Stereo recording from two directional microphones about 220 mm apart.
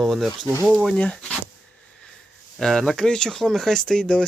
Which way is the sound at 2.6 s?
Centre (ahead or behind).